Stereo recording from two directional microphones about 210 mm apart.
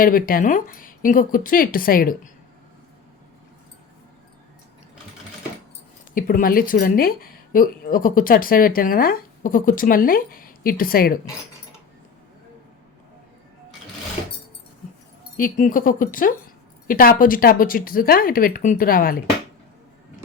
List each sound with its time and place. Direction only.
0.0 s speech: 45° left (ahead or behind)
6.1 s a woman's voice: 40° left (ahead or behind)
15.4 s a woman's voice: 40° left (ahead or behind)